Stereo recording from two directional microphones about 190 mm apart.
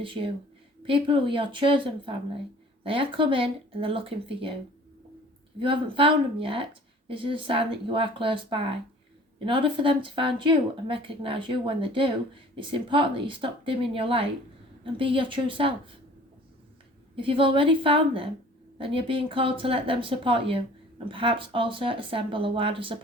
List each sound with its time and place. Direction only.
0.0 s speech: 25° right (ahead or behind)
5.5 s speech: 25° right (ahead or behind)
17.2 s speech: 25° right (ahead or behind)